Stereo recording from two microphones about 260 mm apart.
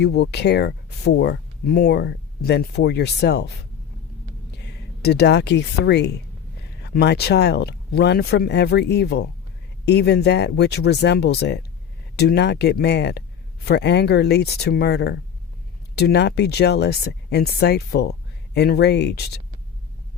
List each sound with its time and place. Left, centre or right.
0.0 s speech: left
4.5 s speech: left